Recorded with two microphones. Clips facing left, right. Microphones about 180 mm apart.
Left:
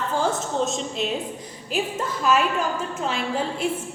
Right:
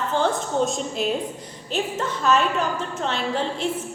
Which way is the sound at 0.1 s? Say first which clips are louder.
Right 2 dB; 5° left (ahead or behind).